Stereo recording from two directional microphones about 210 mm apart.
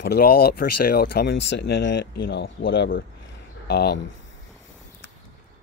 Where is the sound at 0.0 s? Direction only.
50° left (ahead or behind).